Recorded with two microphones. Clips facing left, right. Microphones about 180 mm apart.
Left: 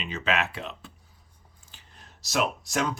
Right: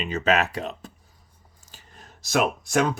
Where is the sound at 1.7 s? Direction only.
50° right (ahead or behind).